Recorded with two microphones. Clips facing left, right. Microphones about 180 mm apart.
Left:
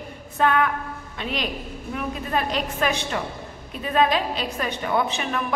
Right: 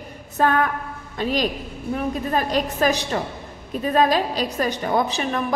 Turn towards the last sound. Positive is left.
turn(degrees=-35)  # may be behind; listen again after turning